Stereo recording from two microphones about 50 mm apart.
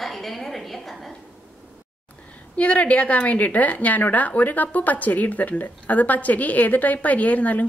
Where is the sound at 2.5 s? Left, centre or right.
Left.